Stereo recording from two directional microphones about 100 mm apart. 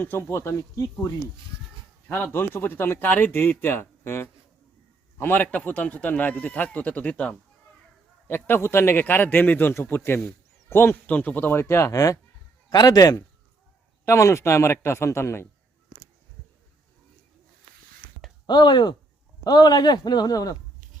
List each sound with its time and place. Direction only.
0.0 s a man's voice: 20° left (ahead or behind)
2.0 s a man's voice: 20° left (ahead or behind)
11.6 s a man's voice: 30° left (ahead or behind)
18.4 s a man's voice: 50° left (ahead or behind)